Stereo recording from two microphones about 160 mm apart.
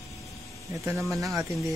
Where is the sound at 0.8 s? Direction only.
20° right (ahead or behind).